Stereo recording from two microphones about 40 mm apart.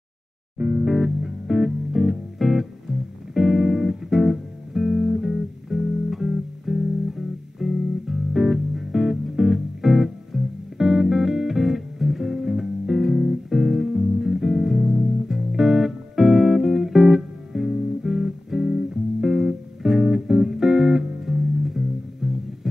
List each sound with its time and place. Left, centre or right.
0.7 s music: centre